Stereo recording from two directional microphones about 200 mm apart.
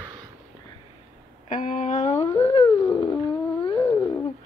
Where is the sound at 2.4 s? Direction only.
30° left (ahead or behind).